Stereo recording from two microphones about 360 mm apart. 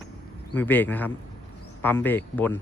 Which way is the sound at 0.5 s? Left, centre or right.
Centre.